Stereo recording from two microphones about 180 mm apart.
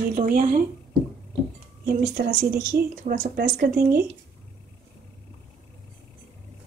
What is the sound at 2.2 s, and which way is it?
Speech, 60° right (ahead or behind).